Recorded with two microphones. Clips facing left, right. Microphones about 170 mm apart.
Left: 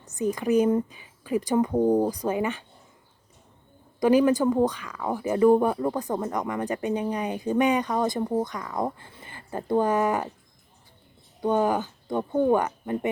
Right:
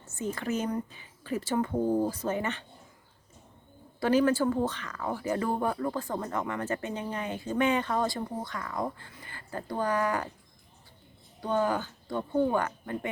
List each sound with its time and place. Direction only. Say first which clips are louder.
0.0 s speech: left 7 dB; 15° left (ahead or behind)
4.0 s speech: left 5 dB; 15° left (ahead or behind)
11.4 s speech: left 5 dB; 15° left (ahead or behind)